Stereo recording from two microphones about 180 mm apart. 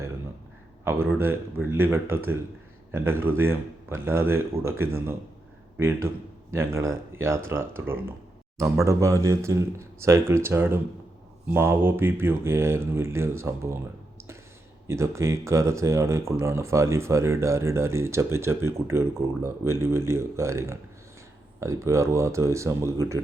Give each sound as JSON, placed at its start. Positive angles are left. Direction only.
{"t": 0.9, "sound": "a man's voice", "side_deg": -15}
{"t": 14.8, "sound": "speech", "side_deg": -15}